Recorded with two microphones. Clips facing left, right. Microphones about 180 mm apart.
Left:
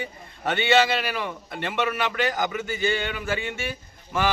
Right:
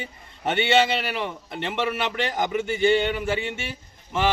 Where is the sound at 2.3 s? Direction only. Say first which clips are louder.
Right 3 dB; 25° right (ahead or behind).